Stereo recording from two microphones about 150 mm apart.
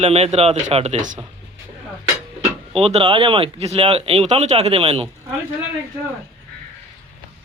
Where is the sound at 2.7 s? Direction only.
40° right (ahead or behind).